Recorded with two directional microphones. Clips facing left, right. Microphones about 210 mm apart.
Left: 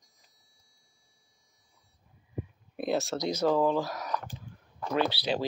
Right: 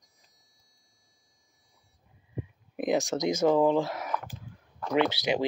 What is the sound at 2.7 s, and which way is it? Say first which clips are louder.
Speech: right 3 dB; 15° right (ahead or behind).